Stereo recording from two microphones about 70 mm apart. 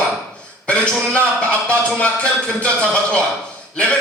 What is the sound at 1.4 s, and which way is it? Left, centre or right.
Speech, centre.